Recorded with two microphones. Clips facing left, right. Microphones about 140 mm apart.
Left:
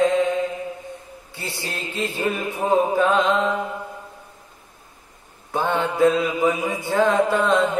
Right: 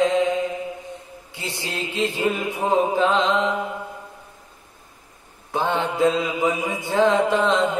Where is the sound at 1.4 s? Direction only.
20° right (ahead or behind).